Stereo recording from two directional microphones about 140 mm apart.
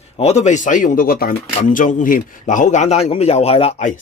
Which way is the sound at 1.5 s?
70° left (ahead or behind).